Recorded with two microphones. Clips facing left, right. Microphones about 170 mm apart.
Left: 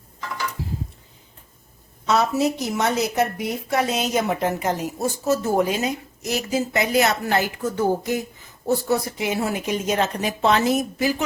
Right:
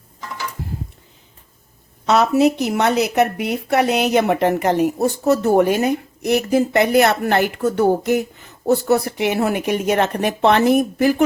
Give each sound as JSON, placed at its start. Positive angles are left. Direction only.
{"t": 2.0, "sound": "a woman's voice", "side_deg": -65}